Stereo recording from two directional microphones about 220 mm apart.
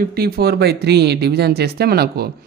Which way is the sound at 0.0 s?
45° right (ahead or behind).